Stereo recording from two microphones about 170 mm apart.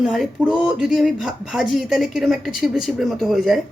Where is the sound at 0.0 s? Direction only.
Centre (ahead or behind).